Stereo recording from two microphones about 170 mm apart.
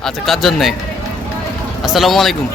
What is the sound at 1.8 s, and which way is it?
Speech, centre (ahead or behind).